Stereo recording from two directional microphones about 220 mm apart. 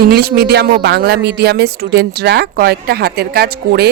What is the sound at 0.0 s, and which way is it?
Speech, 45° right (ahead or behind).